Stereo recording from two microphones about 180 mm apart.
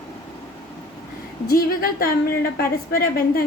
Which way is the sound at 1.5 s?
55° left (ahead or behind).